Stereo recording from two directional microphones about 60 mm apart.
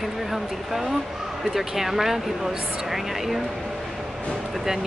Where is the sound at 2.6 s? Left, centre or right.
Centre.